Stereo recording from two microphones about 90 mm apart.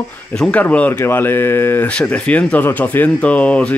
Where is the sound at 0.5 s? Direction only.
15° left (ahead or behind).